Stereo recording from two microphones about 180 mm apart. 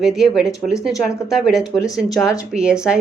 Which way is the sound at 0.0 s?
5° right (ahead or behind).